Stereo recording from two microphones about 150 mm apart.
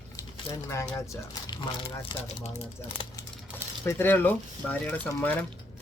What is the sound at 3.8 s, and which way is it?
Speech, 15° left (ahead or behind).